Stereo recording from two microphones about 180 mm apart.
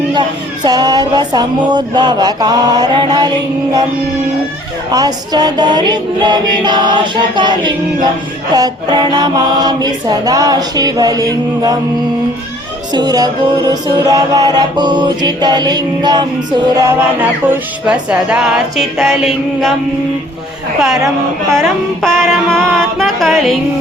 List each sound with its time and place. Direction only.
0.1 s music: 25° right (ahead or behind)
4.9 s music: 20° right (ahead or behind)
12.9 s music: 20° right (ahead or behind)
17.2 s music: 10° right (ahead or behind)
22.0 s music: centre (ahead or behind)